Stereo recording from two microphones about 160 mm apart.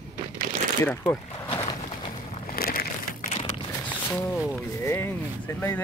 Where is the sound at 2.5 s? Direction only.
70° left (ahead or behind).